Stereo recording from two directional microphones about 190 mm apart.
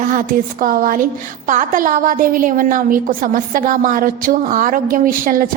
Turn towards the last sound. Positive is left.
turn(degrees=-45)  # may be behind; listen again after turning